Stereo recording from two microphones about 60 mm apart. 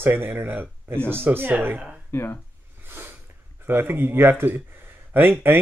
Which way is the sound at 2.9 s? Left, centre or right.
Right.